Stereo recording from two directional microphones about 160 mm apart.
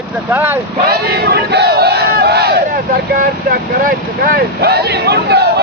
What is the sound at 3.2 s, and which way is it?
Speech, 60° right (ahead or behind).